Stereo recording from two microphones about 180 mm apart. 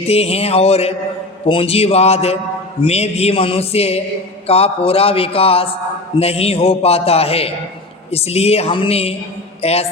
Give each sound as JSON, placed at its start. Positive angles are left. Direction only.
{"t": 0.0, "sound": "a man's voice", "side_deg": 35}